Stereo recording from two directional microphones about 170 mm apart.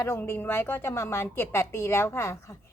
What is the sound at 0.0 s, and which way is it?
A woman's voice, 15° left (ahead or behind).